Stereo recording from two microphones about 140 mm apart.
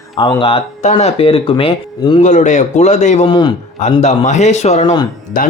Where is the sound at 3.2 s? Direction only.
35° left (ahead or behind).